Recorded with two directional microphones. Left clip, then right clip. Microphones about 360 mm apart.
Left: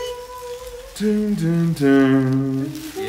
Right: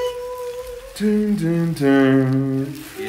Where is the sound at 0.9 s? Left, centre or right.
Centre.